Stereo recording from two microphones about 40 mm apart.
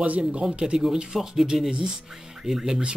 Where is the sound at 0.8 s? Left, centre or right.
Centre.